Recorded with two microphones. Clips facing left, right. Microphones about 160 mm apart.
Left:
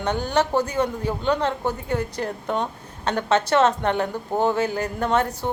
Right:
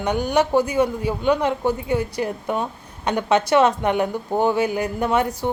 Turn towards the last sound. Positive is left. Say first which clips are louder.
# right 2 dB
turn(degrees=-10)  # may be behind; listen again after turning